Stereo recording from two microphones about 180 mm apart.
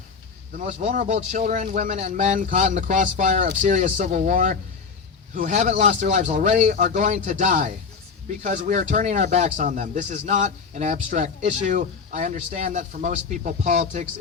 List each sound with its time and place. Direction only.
0.6 s speech: 45° right (ahead or behind)